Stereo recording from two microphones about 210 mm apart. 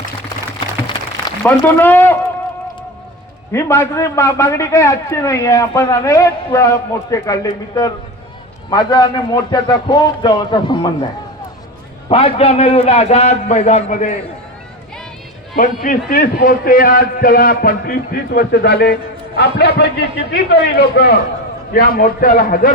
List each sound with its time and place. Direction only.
1.4 s a man's voice: 10° left (ahead or behind)
3.5 s a man's voice: 10° left (ahead or behind)
12.0 s a man's voice: 25° left (ahead or behind)
15.5 s a man's voice: 40° left (ahead or behind)